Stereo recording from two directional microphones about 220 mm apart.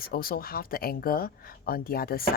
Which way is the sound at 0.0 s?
40° left (ahead or behind).